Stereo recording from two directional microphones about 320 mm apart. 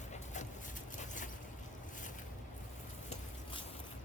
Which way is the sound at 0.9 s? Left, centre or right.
Left.